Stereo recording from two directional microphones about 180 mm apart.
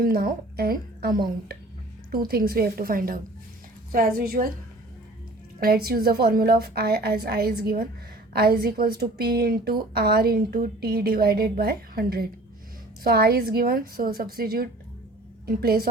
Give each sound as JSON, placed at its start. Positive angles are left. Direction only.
{"t": 0.0, "sound": "a woman's voice", "side_deg": -55}
{"t": 5.5, "sound": "a woman's voice", "side_deg": -55}